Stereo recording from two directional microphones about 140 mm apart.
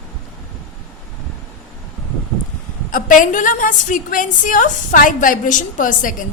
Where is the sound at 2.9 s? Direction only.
70° left (ahead or behind).